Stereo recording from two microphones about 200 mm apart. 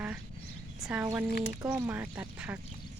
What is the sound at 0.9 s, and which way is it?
Speech, 10° right (ahead or behind).